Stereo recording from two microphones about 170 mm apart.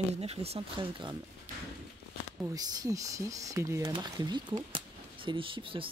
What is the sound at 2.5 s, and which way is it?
Speech, 20° right (ahead or behind).